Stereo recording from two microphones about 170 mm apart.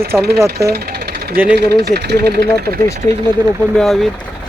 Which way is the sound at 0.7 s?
70° right (ahead or behind).